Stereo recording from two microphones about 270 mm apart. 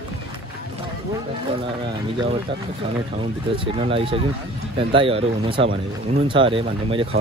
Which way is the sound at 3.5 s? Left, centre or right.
Right.